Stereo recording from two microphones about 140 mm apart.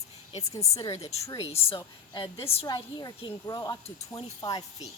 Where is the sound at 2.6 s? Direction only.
30° left (ahead or behind).